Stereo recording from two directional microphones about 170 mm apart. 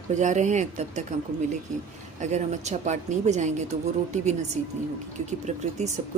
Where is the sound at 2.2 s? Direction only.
45° right (ahead or behind).